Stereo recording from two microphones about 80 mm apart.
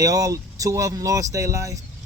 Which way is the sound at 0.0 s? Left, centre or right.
Right.